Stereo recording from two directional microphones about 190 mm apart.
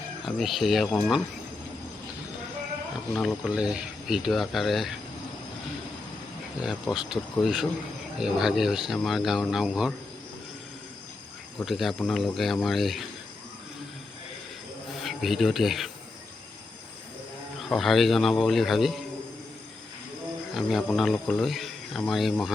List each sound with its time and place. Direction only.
0.3 s speech: centre (ahead or behind)
3.1 s speech: 5° left (ahead or behind)
6.6 s speech: centre (ahead or behind)
11.6 s speech: centre (ahead or behind)
14.9 s speech: centre (ahead or behind)
17.7 s speech: centre (ahead or behind)
20.5 s speech: centre (ahead or behind)